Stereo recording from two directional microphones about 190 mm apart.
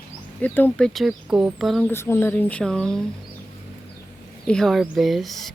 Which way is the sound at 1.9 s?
10° left (ahead or behind).